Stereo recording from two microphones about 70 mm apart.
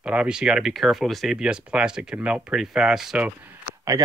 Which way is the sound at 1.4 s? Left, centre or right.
Centre.